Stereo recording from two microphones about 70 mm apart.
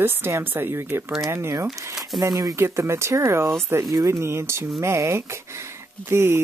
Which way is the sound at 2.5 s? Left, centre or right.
Right.